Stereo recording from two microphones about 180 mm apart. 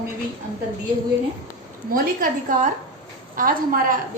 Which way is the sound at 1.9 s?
50° right (ahead or behind).